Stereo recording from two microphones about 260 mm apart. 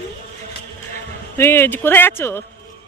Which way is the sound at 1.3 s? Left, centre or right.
Centre.